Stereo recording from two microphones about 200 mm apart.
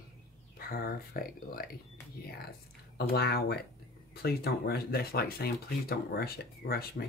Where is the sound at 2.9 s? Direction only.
50° left (ahead or behind).